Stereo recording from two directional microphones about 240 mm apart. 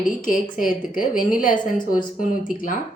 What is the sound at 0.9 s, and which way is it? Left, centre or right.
A woman's voice, left.